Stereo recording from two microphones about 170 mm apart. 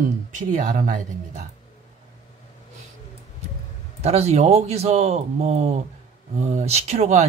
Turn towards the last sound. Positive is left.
turn(degrees=-40)  # may be behind; listen again after turning